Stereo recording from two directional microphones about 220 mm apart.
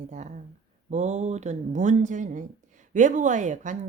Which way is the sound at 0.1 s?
35° right (ahead or behind).